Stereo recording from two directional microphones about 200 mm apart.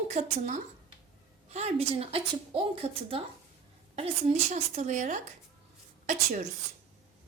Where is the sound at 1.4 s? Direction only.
35° right (ahead or behind).